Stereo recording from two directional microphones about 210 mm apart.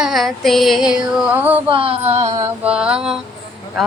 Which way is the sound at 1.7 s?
25° right (ahead or behind).